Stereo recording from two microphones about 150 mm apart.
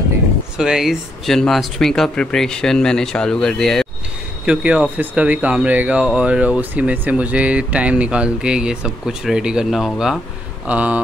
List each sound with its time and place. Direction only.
0.6 s speech: 5° right (ahead or behind)
4.5 s speech: 10° right (ahead or behind)